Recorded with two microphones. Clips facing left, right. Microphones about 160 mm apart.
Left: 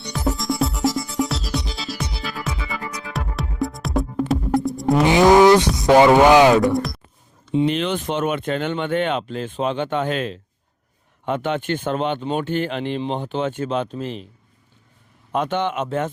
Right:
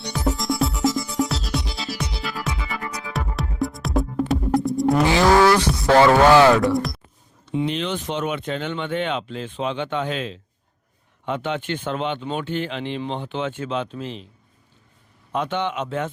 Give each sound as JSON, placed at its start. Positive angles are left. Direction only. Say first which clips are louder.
{"t": 0.1, "sound": "music", "louder": "left 1 dB", "side_deg": 0}
{"t": 5.0, "sound": "speech", "louder": "left 5 dB", "side_deg": 20}
{"t": 6.7, "sound": "speech", "louder": "left 1 dB", "side_deg": 0}
{"t": 7.7, "sound": "speech", "louder": "left 3 dB", "side_deg": 55}
{"t": 15.3, "sound": "speech", "louder": "left 3 dB", "side_deg": 45}